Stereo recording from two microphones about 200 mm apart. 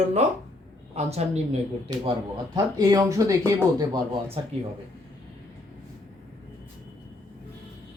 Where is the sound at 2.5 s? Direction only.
20° right (ahead or behind).